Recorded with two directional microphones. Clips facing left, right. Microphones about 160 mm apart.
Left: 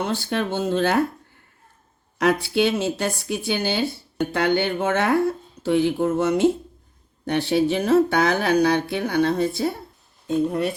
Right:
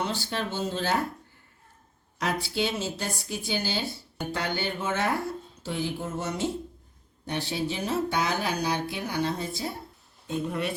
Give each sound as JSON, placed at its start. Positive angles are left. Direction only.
{"t": 0.0, "sound": "speech", "side_deg": 55}
{"t": 2.1, "sound": "speech", "side_deg": 60}
{"t": 10.2, "sound": "speech", "side_deg": 40}